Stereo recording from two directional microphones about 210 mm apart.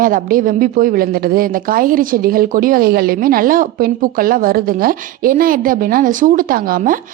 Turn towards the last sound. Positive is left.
turn(degrees=-40)  # may be behind; listen again after turning